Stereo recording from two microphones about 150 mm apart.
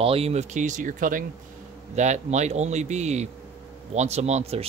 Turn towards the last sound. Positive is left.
turn(degrees=-45)  # may be behind; listen again after turning